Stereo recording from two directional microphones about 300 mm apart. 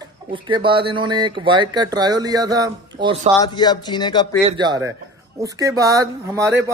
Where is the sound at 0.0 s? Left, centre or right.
Centre.